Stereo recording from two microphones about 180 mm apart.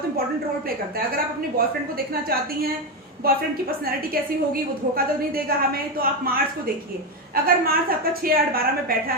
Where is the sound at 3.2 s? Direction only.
55° right (ahead or behind).